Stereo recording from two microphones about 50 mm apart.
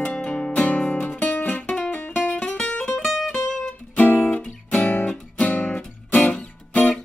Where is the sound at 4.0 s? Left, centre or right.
Left.